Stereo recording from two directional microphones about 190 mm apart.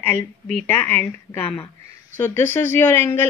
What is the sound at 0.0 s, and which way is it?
A woman's voice, 10° left (ahead or behind).